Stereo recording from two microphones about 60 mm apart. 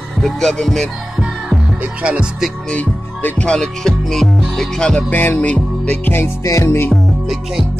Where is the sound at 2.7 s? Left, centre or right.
Left.